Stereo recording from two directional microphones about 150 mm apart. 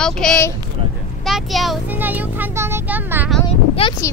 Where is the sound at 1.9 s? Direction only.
10° right (ahead or behind).